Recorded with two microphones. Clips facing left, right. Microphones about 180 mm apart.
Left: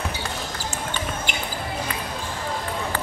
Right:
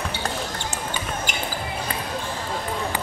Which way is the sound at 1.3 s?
45° right (ahead or behind).